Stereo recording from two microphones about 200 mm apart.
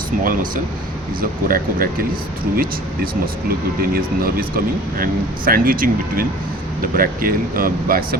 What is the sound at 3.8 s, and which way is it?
Speech, 45° right (ahead or behind).